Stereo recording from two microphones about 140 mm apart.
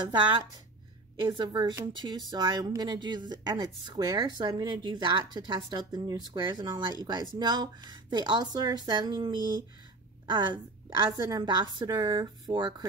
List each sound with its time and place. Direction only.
0.0 s speech: 35° right (ahead or behind)
1.3 s speech: 30° right (ahead or behind)